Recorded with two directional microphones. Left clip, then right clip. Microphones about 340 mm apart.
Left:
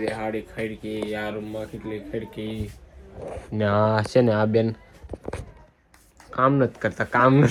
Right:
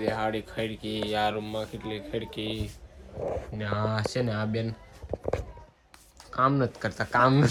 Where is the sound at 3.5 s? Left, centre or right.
Centre.